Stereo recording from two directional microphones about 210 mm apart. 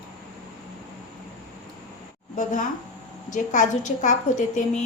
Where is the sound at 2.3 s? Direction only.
40° left (ahead or behind).